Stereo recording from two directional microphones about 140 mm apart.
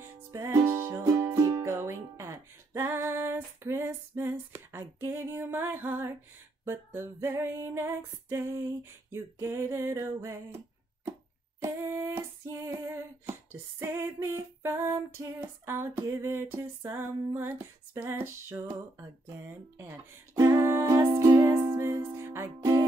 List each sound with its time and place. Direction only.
0.0 s music: 20° right (ahead or behind)
6.6 s female singing: 15° right (ahead or behind)
9.1 s a sound: 15° right (ahead or behind)
11.6 s female singing: 20° right (ahead or behind)
20.3 s music: 20° right (ahead or behind)